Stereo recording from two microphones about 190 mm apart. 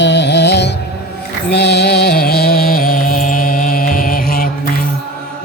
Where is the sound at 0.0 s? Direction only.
65° left (ahead or behind); by 3.2 s 45° left (ahead or behind).